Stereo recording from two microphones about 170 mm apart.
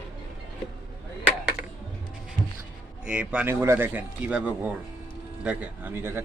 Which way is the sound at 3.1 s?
5° right (ahead or behind).